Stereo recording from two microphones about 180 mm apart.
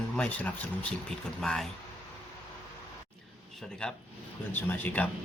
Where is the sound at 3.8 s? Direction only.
5° left (ahead or behind).